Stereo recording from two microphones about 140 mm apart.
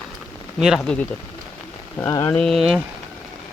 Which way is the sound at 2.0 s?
20° left (ahead or behind).